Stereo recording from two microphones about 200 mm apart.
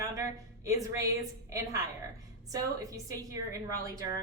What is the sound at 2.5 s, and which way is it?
Speech, 15° right (ahead or behind).